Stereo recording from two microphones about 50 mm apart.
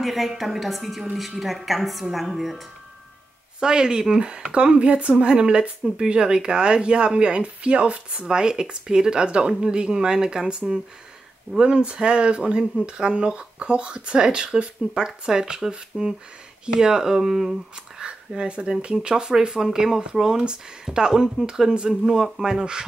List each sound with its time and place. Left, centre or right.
0.0 s a woman's voice: centre
3.5 s a woman's voice: centre
18.0 s speech: centre